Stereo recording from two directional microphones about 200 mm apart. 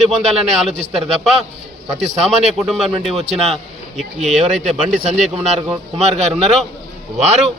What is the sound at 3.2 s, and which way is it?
Speech, 30° right (ahead or behind).